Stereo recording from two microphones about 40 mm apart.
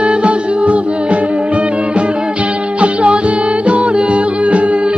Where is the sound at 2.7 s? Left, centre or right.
Right.